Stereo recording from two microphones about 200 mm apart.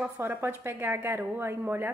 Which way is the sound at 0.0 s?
10° right (ahead or behind).